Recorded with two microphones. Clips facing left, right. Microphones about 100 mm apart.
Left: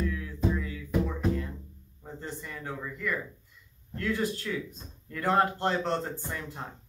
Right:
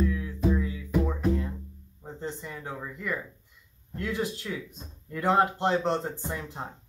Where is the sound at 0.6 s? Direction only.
25° right (ahead or behind).